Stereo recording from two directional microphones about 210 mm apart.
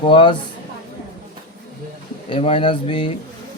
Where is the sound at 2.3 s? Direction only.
25° left (ahead or behind).